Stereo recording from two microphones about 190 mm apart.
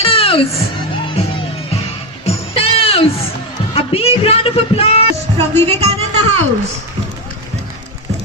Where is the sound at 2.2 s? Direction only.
30° left (ahead or behind).